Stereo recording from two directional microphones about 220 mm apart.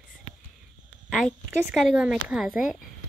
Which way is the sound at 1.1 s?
5° right (ahead or behind).